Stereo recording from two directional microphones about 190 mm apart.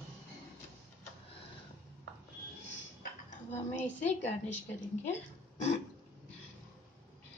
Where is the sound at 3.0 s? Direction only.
40° left (ahead or behind).